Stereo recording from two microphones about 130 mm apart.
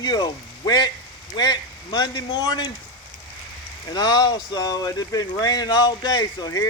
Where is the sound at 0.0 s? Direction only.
30° left (ahead or behind).